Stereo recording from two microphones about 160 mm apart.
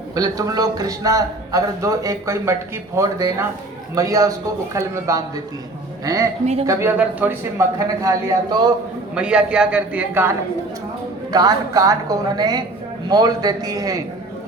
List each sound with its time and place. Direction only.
0.2 s a man's voice: 25° right (ahead or behind)
7.8 s a man's voice: 20° right (ahead or behind)
9.1 s a man's voice: 5° right (ahead or behind)
11.3 s a man's voice: 25° right (ahead or behind)